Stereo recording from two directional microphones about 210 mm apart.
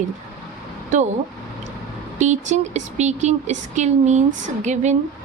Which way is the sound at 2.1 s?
35° right (ahead or behind).